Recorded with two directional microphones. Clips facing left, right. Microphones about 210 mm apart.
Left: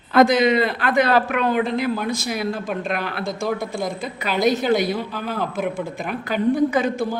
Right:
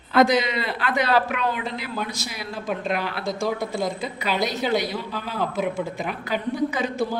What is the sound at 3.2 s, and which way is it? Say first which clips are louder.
Speech: left 1 dB; centre (ahead or behind).